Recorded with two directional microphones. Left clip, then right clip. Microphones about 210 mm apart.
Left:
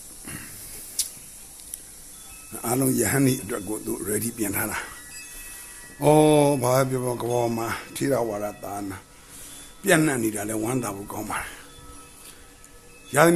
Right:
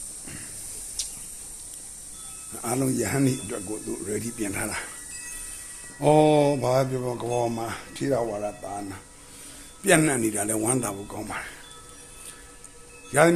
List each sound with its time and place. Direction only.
1.0 s a sound: 30° left (ahead or behind)
2.5 s mantra: 20° left (ahead or behind)
6.0 s mantra: 20° left (ahead or behind)
9.8 s a man's voice: 5° left (ahead or behind)
11.1 s speech: 15° left (ahead or behind)
13.1 s a man's voice: 10° left (ahead or behind)